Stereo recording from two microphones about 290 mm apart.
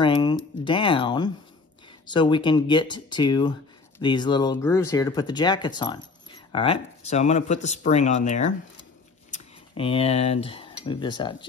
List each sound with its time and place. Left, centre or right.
0.0 s speech: centre